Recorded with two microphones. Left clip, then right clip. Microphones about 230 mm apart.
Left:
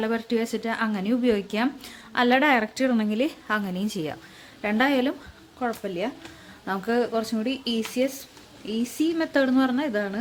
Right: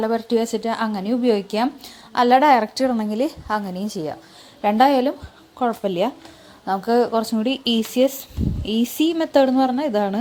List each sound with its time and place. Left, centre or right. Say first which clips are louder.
0.0 s a woman's voice: right 6 dB; centre
4.6 s a woman's voice: right 7 dB; centre
5.5 s a woman's voice: right 8 dB; centre